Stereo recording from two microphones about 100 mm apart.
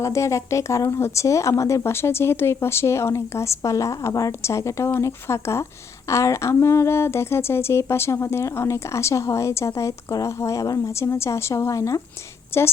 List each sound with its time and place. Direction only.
0.0 s speech: 30° left (ahead or behind)